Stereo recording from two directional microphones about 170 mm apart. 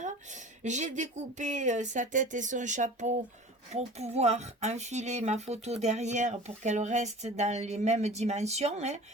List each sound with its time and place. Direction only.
0.0 s speech: 45° right (ahead or behind)